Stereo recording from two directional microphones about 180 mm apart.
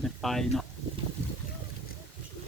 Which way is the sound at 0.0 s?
Centre (ahead or behind).